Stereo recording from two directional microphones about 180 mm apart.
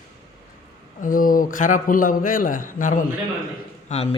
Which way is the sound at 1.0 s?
50° left (ahead or behind).